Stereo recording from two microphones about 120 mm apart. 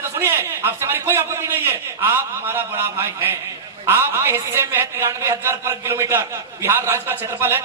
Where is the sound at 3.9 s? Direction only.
20° right (ahead or behind).